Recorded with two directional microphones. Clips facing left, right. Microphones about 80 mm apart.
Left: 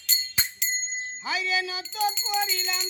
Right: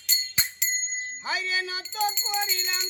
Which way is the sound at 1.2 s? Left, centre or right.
Right.